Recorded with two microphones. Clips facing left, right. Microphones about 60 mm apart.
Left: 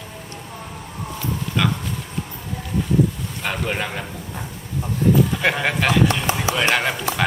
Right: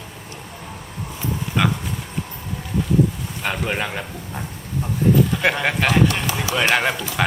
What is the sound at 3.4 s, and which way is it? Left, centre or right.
A man's voice, centre.